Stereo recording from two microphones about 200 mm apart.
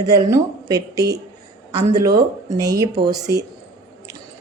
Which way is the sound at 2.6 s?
15° right (ahead or behind).